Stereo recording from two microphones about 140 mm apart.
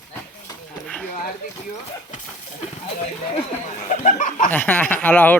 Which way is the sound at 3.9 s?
60° left (ahead or behind).